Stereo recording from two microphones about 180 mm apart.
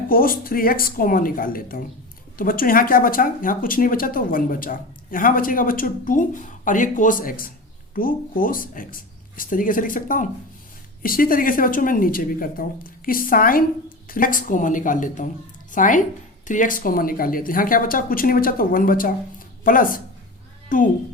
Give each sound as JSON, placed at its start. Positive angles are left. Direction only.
{"t": 0.1, "sound": "speech", "side_deg": 55}